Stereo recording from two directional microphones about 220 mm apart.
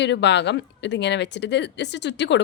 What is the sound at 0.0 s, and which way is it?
Speech, 50° left (ahead or behind).